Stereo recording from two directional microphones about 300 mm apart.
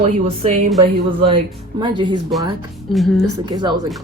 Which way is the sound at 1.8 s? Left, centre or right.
Centre.